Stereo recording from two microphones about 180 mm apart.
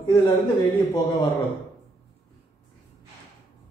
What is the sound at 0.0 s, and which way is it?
Speech, 25° left (ahead or behind).